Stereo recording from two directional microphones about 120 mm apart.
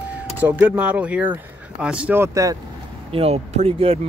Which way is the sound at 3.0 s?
55° right (ahead or behind).